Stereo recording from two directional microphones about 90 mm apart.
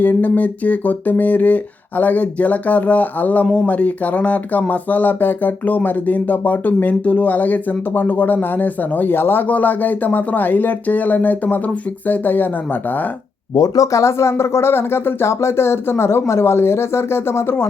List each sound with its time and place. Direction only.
0.0 s speech: 20° left (ahead or behind)
13.5 s speech: 45° left (ahead or behind); by 17.7 s 25° left (ahead or behind)